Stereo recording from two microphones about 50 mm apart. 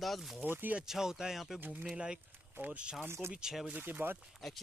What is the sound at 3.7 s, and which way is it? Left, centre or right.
Speech, right.